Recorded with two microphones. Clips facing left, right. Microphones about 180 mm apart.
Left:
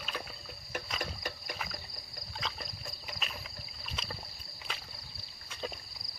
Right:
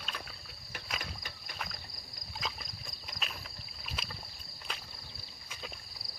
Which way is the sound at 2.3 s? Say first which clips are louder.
Even; centre (ahead or behind).